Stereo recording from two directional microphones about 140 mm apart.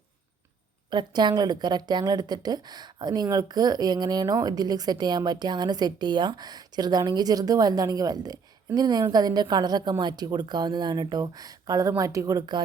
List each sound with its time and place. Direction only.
0.9 s a woman's voice: 30° right (ahead or behind)